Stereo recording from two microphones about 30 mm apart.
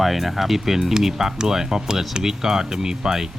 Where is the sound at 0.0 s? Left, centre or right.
Centre.